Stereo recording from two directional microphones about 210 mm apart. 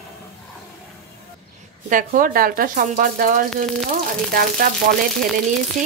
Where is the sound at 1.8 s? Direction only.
40° right (ahead or behind).